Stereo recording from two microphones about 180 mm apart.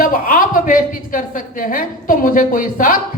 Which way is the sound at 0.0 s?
50° left (ahead or behind).